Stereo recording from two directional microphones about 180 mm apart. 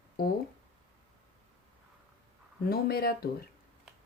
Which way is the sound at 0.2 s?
55° left (ahead or behind).